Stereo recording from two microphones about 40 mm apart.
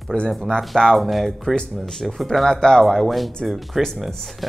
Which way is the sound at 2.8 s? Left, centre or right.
Centre.